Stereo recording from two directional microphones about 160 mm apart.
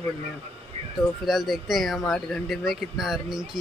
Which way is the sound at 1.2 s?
Centre (ahead or behind).